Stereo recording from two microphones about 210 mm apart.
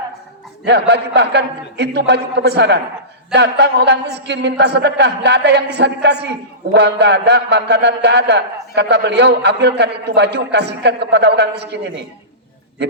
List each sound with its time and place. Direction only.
0.6 s a man's voice: 55° right (ahead or behind)